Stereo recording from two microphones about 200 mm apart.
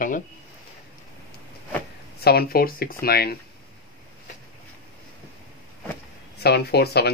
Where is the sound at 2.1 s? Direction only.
50° left (ahead or behind).